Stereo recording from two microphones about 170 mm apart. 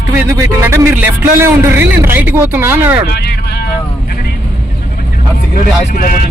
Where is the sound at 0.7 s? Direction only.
15° right (ahead or behind).